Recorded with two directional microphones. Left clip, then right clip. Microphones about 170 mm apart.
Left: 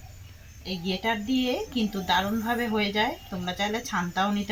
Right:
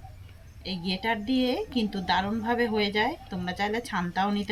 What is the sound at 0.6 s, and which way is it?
Speech, 10° right (ahead or behind).